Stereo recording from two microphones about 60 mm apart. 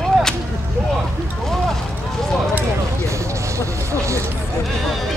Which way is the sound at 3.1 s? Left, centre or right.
Right.